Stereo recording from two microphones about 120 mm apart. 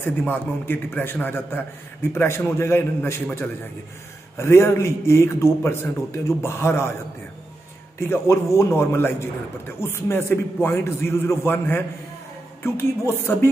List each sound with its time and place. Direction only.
0.0 s a man's voice: 15° left (ahead or behind)
4.4 s a man's voice: 20° left (ahead or behind)
8.0 s a man's voice: 20° left (ahead or behind)